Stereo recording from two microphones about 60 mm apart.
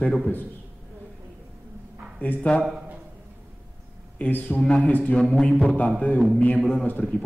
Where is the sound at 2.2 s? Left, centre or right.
Left.